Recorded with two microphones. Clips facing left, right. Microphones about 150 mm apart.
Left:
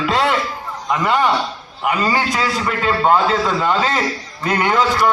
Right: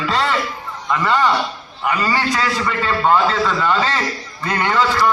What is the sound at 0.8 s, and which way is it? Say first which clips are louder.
A man's voice: even; 15° left (ahead or behind).